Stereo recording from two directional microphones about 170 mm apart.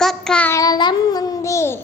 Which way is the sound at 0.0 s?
Centre (ahead or behind).